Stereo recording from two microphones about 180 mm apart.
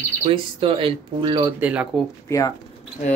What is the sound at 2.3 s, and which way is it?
Speech, 20° left (ahead or behind).